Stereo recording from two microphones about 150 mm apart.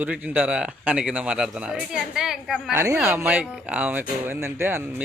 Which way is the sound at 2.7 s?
20° right (ahead or behind).